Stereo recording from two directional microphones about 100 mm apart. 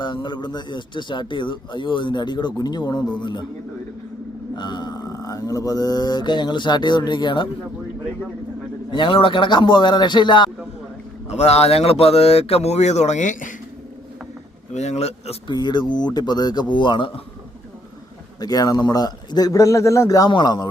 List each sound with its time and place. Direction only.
0.0 s speech: 50° left (ahead or behind)
4.5 s speech: 50° left (ahead or behind)
8.9 s speech: 55° left (ahead or behind)
11.3 s a man's voice: 90° left
14.8 s a man's voice: 90° left
15.4 s speech: 45° left (ahead or behind)
18.3 s a man's voice: 40° left (ahead or behind)